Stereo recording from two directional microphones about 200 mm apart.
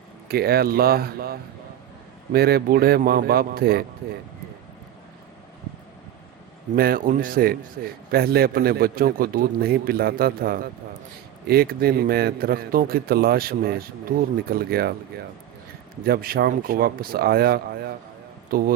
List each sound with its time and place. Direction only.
0.3 s a man's voice: 50° right (ahead or behind)
6.7 s a man's voice: 50° right (ahead or behind)
16.0 s a man's voice: 50° right (ahead or behind)